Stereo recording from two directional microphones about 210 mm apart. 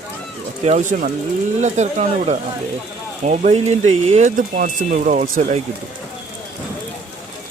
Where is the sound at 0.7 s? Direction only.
35° right (ahead or behind).